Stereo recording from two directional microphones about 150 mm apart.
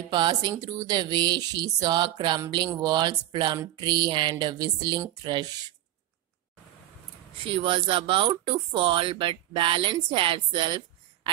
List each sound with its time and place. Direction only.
0.1 s speech: 30° right (ahead or behind)
7.3 s speech: 35° right (ahead or behind)